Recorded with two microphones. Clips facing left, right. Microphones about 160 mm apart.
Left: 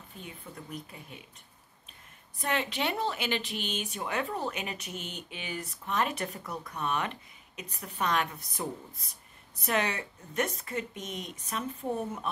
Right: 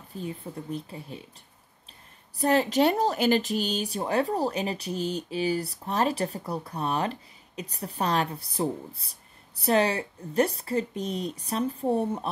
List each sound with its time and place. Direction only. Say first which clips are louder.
0.1 s speech: right 11 dB; 35° right (ahead or behind)
2.3 s speech: right 9 dB; 35° right (ahead or behind)